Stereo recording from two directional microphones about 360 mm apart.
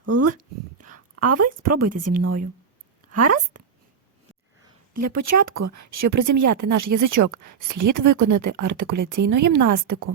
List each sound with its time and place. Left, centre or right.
0.0 s speech: right
0.8 s a sound: right
1.3 s speech: right
4.9 s speech: right